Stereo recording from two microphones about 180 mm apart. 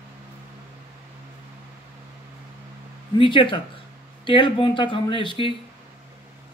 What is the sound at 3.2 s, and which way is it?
Speech, 25° left (ahead or behind).